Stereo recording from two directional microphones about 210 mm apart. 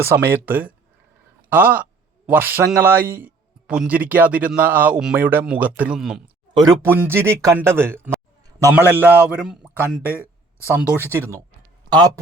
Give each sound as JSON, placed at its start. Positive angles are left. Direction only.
{"t": 0.0, "sound": "a man's voice", "side_deg": -10}
{"t": 6.5, "sound": "a man's voice", "side_deg": -20}
{"t": 10.1, "sound": "a sound", "side_deg": 10}
{"t": 10.8, "sound": "a man's voice", "side_deg": -10}